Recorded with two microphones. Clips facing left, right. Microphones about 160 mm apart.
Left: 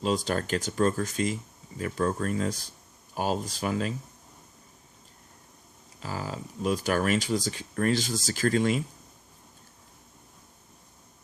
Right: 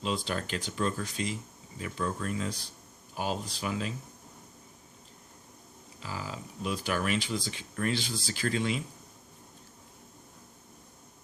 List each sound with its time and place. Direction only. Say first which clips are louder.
0.0 s speech: left 5 dB; 40° left (ahead or behind)
6.0 s speech: left 4 dB; 45° left (ahead or behind)